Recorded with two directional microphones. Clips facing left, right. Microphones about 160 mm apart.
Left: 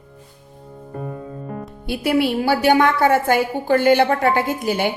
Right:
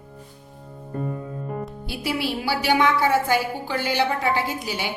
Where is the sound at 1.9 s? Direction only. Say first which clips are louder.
Left 9 dB; 55° left (ahead or behind).